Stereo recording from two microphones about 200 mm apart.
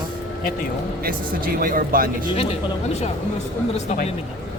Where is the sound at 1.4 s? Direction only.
45° right (ahead or behind).